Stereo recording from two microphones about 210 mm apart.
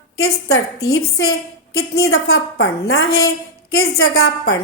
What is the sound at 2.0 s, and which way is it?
A woman's voice, 75° left (ahead or behind).